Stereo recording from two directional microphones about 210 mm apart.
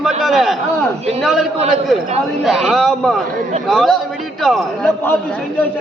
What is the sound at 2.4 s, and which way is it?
A man's voice, centre (ahead or behind).